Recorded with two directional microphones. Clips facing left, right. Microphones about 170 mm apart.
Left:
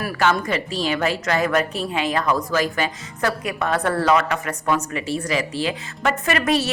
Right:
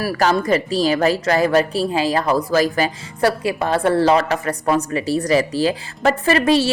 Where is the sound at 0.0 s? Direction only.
35° right (ahead or behind).